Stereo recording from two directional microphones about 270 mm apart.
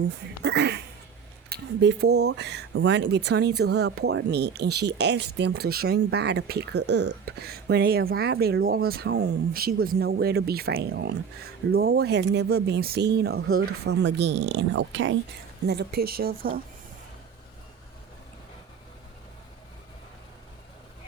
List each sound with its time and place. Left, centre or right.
0.4 s speech: right